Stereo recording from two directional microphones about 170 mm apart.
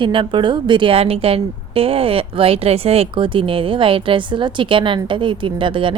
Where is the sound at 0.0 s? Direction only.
30° right (ahead or behind).